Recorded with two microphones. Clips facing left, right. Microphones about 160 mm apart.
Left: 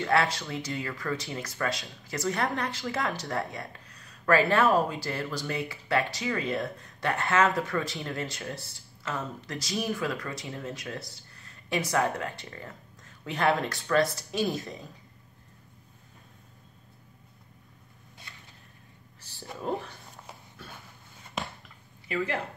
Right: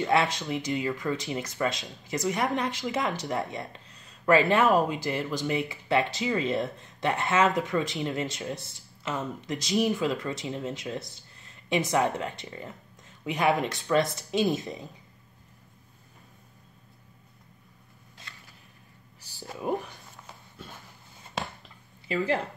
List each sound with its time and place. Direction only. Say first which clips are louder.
0.0 s speech: right 1 dB; 20° right (ahead or behind)
19.6 s speech: right 2 dB; 15° right (ahead or behind)
21.6 s a sound: right 4 dB; 30° right (ahead or behind)